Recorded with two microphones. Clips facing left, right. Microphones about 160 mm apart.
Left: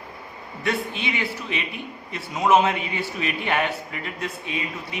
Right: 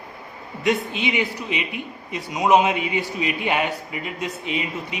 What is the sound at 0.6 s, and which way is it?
A man's voice, 20° right (ahead or behind).